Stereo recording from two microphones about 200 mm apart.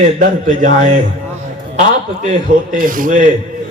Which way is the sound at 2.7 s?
45° right (ahead or behind).